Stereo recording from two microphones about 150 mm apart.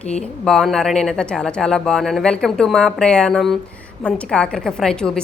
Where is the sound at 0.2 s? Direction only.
5° left (ahead or behind).